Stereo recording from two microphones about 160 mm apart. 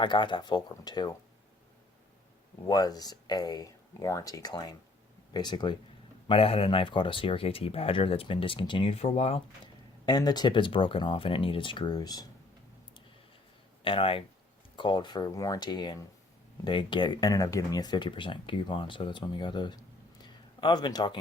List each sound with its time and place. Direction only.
0.0 s speech: 30° left (ahead or behind)
2.6 s speech: 25° left (ahead or behind); by 9.4 s 40° left (ahead or behind)
10.1 s speech: 25° left (ahead or behind)
13.8 s speech: 35° left (ahead or behind)
20.2 s a sound: 30° left (ahead or behind)